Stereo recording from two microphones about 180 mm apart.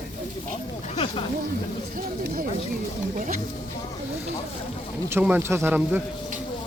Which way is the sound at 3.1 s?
45° right (ahead or behind).